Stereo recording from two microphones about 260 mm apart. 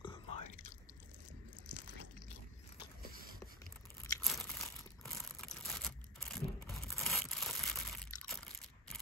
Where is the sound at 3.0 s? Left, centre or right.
Right.